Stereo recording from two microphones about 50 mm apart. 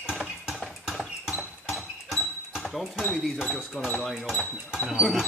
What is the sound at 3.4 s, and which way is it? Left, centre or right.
Speech, centre.